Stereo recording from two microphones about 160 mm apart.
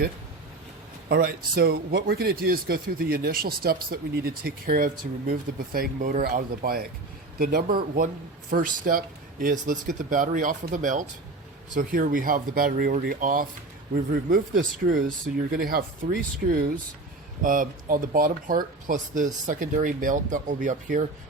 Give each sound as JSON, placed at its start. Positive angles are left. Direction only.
{"t": 1.0, "sound": "speech", "side_deg": -70}
{"t": 7.9, "sound": "speech", "side_deg": -60}
{"t": 17.4, "sound": "speech", "side_deg": -60}